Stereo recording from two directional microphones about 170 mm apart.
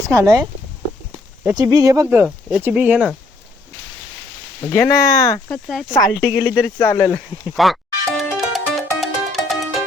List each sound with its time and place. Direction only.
0.0 s speech: 20° right (ahead or behind)
1.5 s speech: 20° right (ahead or behind)
2.0 s speech: 10° right (ahead or behind)
4.6 s speech: 20° left (ahead or behind)
5.5 s speech: centre (ahead or behind)
5.9 s speech: 20° left (ahead or behind)
7.5 s music: centre (ahead or behind)